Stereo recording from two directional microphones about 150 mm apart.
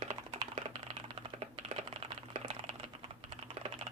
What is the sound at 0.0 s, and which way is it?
Typing, 35° right (ahead or behind).